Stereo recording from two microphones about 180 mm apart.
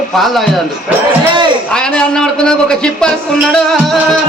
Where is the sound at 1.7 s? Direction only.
5° left (ahead or behind).